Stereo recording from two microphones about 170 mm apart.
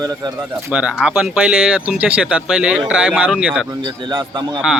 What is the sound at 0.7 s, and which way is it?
Speech, 5° right (ahead or behind).